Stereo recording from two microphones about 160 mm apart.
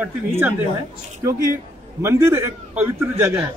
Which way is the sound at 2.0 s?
15° right (ahead or behind).